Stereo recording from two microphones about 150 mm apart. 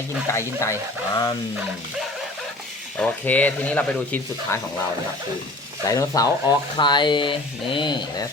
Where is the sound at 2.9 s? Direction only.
10° left (ahead or behind).